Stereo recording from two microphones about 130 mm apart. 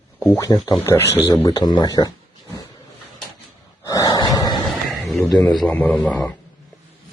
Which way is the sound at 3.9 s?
30° left (ahead or behind).